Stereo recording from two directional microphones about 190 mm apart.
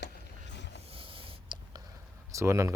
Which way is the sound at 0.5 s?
65° left (ahead or behind).